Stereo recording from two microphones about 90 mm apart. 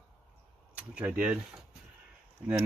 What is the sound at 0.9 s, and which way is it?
Speech, 15° right (ahead or behind).